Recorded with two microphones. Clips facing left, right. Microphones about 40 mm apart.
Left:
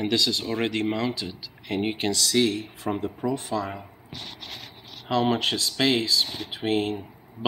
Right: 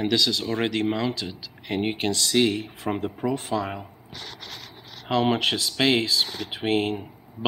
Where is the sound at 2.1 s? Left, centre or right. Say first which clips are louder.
Right 1 dB; right.